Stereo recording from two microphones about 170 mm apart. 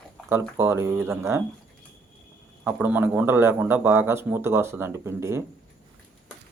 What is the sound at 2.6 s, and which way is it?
Speech, 10° right (ahead or behind).